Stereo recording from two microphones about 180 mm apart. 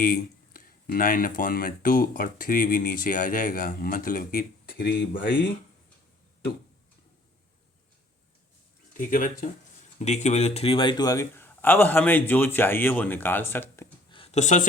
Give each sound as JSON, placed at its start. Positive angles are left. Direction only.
{"t": 0.0, "sound": "speech", "side_deg": 50}
{"t": 8.9, "sound": "a man's voice", "side_deg": 50}
{"t": 14.1, "sound": "a sound", "side_deg": 35}